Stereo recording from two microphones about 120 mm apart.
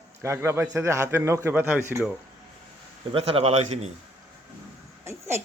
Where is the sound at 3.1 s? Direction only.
55° right (ahead or behind).